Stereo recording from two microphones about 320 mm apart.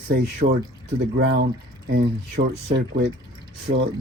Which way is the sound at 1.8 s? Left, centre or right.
Right.